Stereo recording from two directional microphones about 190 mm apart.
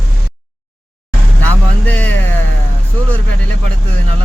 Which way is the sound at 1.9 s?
10° left (ahead or behind).